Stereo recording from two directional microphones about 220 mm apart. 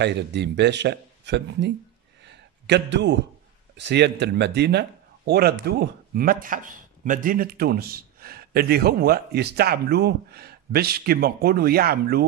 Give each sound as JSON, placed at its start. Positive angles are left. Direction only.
{"t": 0.0, "sound": "speech", "side_deg": -50}
{"t": 2.2, "sound": "a sound", "side_deg": -50}
{"t": 3.7, "sound": "speech", "side_deg": -50}